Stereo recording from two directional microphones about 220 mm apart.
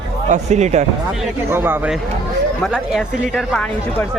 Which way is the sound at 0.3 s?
30° right (ahead or behind).